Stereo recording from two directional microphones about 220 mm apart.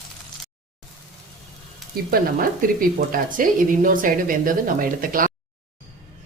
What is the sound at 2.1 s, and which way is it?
A woman's voice, 40° right (ahead or behind).